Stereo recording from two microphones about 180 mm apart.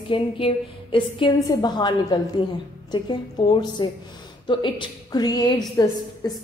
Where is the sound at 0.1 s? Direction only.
30° left (ahead or behind).